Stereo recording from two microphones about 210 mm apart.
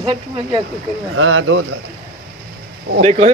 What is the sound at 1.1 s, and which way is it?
Speech, 70° right (ahead or behind).